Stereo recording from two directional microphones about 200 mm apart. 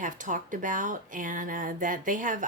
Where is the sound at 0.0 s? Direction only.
40° right (ahead or behind).